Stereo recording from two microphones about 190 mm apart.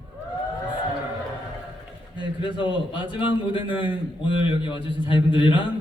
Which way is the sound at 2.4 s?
25° left (ahead or behind).